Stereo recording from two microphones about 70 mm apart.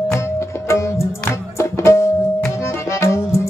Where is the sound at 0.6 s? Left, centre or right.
Left.